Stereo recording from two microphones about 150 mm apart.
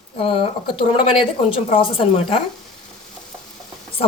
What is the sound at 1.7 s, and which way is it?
Speech, 40° left (ahead or behind).